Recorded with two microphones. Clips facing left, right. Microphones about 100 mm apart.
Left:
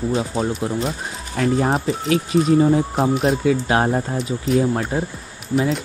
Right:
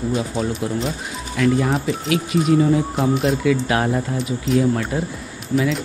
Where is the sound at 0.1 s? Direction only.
25° left (ahead or behind).